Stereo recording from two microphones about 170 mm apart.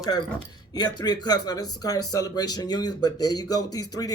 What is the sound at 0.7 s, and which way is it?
Speech, 25° left (ahead or behind).